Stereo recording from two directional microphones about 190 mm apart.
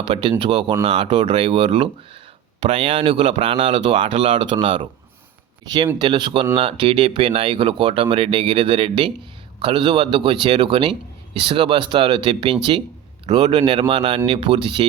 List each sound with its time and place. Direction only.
0.0 s speech: 25° right (ahead or behind)